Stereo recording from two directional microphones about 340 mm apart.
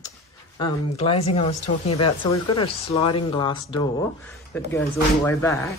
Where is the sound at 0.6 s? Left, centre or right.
Centre.